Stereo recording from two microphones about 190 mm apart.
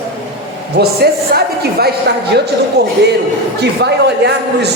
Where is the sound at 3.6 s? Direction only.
60° right (ahead or behind).